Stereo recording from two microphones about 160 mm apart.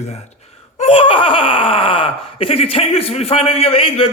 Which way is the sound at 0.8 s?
35° left (ahead or behind).